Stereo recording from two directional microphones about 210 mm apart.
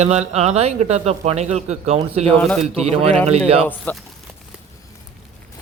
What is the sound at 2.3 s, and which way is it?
Speech, 5° left (ahead or behind).